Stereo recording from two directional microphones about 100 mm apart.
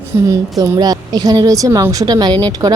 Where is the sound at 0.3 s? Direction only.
40° right (ahead or behind).